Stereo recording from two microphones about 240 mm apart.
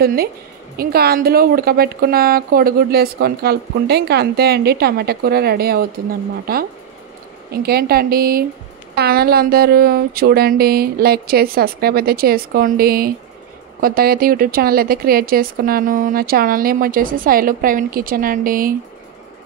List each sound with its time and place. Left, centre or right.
0.0 s a woman's voice: right